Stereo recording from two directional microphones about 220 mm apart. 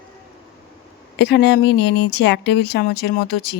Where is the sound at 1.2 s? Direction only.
50° left (ahead or behind).